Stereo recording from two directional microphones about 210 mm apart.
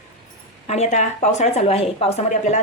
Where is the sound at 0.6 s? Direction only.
30° left (ahead or behind).